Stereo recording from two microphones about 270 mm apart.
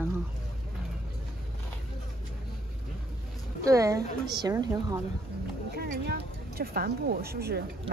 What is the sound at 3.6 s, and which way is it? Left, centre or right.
Speech, centre.